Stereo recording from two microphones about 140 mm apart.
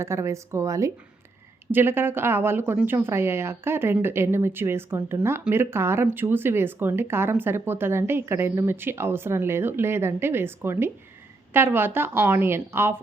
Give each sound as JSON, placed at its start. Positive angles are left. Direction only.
{"t": 0.0, "sound": "speech", "side_deg": -20}